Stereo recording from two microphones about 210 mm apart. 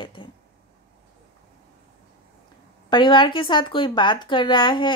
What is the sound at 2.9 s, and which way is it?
Speech, 20° left (ahead or behind).